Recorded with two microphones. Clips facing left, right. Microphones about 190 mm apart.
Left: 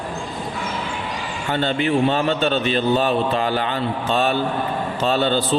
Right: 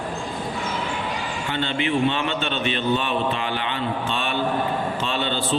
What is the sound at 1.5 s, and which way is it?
A man's voice, 40° left (ahead or behind).